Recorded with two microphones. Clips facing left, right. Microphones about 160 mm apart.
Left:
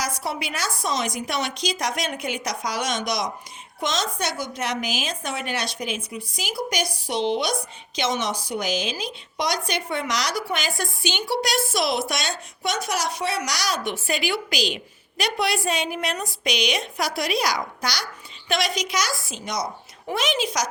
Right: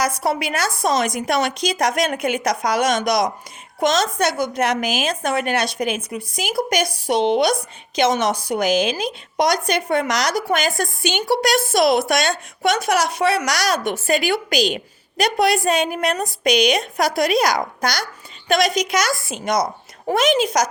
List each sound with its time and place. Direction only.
0.2 s a woman's voice: 55° right (ahead or behind)